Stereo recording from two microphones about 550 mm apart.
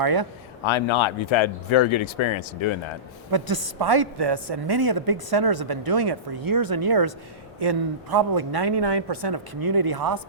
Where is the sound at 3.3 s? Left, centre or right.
Right.